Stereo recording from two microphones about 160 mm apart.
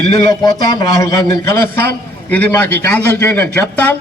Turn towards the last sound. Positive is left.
turn(degrees=10)  # may be behind; listen again after turning